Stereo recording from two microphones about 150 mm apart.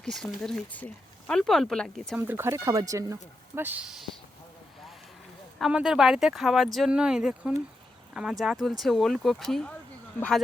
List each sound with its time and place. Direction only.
0.0 s speech: centre (ahead or behind)
2.1 s speech: 15° right (ahead or behind)
5.5 s speech: centre (ahead or behind)